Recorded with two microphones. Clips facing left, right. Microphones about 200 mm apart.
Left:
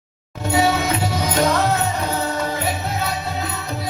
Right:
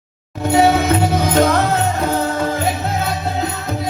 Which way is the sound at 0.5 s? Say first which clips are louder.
Right 5 dB; 55° right (ahead or behind).